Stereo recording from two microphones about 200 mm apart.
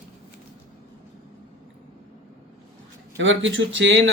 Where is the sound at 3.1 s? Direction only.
70° right (ahead or behind).